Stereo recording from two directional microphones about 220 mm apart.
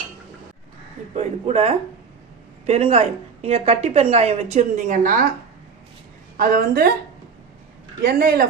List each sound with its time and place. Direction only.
1.1 s a woman's voice: 30° right (ahead or behind)
6.3 s speech: 40° right (ahead or behind)
8.0 s speech: 45° right (ahead or behind)